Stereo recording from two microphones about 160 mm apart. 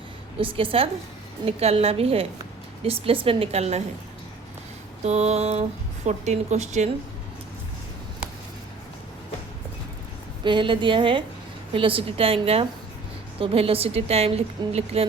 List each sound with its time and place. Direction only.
0.3 s a woman's voice: 35° right (ahead or behind)
5.0 s speech: 45° right (ahead or behind)
10.4 s a woman's voice: 30° right (ahead or behind)